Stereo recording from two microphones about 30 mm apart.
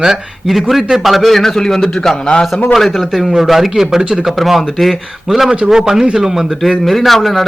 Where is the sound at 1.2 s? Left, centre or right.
Centre.